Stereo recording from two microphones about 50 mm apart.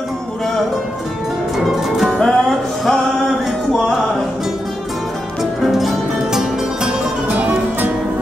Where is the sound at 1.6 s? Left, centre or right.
Centre.